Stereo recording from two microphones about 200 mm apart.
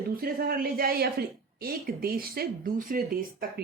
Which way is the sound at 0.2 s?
45° right (ahead or behind).